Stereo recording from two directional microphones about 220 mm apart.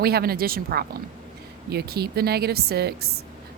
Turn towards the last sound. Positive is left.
turn(degrees=-45)  # may be behind; listen again after turning